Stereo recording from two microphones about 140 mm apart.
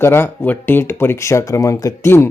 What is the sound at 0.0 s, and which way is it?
Speech, 15° left (ahead or behind).